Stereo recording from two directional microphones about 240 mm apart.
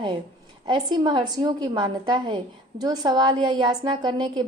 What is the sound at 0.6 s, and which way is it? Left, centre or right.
A woman's voice, centre.